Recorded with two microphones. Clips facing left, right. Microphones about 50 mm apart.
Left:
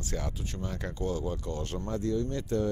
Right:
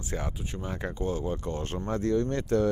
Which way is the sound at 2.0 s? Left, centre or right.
Right.